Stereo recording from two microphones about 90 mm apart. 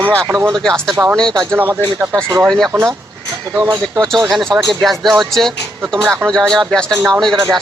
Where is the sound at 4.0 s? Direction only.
Centre (ahead or behind).